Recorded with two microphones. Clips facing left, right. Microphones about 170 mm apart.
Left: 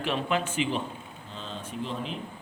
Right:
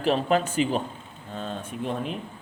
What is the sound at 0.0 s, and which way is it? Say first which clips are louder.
Speech: right 6 dB; 40° right (ahead or behind).